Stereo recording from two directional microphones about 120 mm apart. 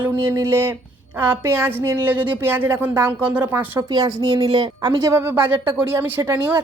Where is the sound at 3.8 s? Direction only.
30° right (ahead or behind).